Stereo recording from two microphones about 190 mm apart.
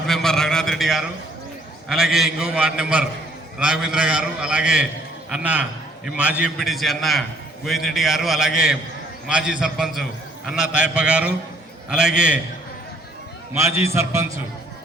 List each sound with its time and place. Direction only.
0.1 s a sound: 5° left (ahead or behind)
1.9 s a man's voice: centre (ahead or behind)
13.5 s a man's voice: 15° right (ahead or behind)